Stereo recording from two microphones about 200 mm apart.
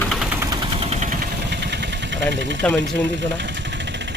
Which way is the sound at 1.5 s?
60° right (ahead or behind).